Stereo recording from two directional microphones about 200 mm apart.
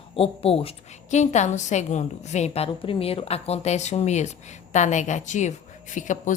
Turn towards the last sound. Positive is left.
turn(degrees=40)  # may be behind; listen again after turning